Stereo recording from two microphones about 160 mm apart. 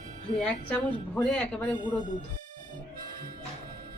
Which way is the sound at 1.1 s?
10° left (ahead or behind).